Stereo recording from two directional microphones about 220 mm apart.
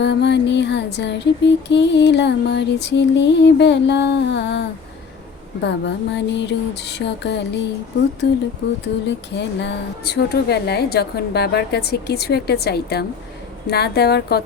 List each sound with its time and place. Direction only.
0.0 s music: 50° left (ahead or behind)